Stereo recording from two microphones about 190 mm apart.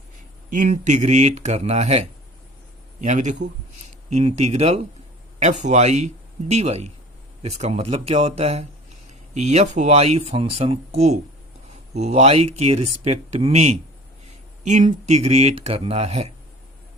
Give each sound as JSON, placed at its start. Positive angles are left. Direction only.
{"t": 0.5, "sound": "speech", "side_deg": -40}